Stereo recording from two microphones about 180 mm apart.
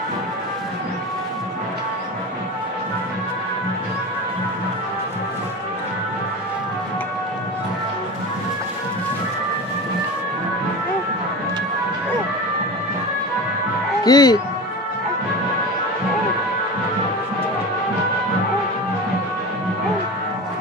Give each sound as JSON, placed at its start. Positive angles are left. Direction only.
{"t": 14.0, "sound": "speech", "side_deg": 20}